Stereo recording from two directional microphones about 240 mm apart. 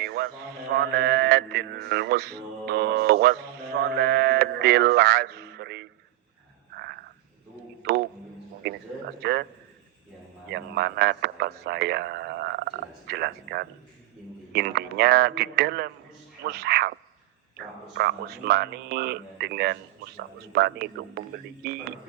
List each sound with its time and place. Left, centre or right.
0.0 s music: right
0.8 s speech: right
6.7 s frog: right
7.8 s a sound: right
9.2 s speech: right
10.5 s speech: right
17.9 s speech: right